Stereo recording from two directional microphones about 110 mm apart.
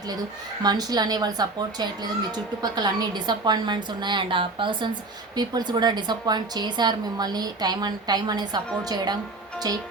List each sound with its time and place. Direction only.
0.6 s a woman's voice: 35° right (ahead or behind)